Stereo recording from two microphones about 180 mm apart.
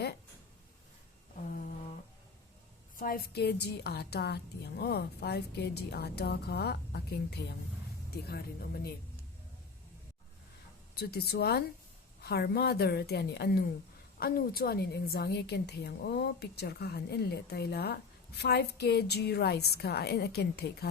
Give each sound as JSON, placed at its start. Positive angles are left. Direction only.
{"t": 2.9, "sound": "a woman's voice", "side_deg": 55}
{"t": 11.1, "sound": "a woman's voice", "side_deg": 65}